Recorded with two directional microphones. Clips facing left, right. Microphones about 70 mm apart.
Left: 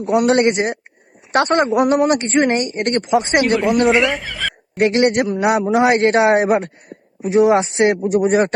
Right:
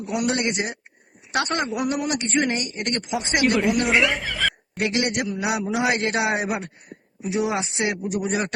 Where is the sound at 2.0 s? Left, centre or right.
Left.